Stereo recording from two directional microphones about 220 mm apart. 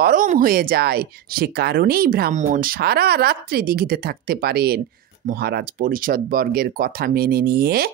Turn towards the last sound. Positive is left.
turn(degrees=-45)  # may be behind; listen again after turning